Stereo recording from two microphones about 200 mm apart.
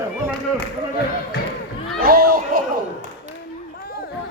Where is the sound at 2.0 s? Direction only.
50° right (ahead or behind).